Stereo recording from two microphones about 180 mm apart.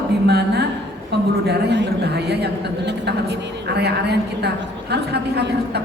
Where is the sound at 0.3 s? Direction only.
65° right (ahead or behind).